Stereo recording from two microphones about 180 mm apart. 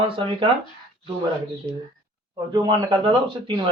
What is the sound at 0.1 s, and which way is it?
Speech, 30° right (ahead or behind).